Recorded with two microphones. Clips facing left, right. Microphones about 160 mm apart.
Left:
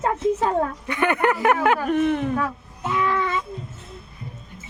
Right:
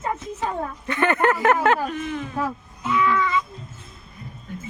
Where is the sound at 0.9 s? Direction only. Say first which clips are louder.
Right 2 dB; 15° left (ahead or behind).